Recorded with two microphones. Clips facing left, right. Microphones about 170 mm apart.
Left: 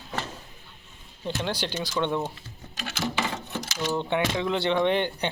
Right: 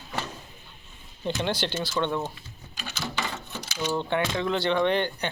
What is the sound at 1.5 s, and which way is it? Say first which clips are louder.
Speech: right 2 dB; 10° left (ahead or behind).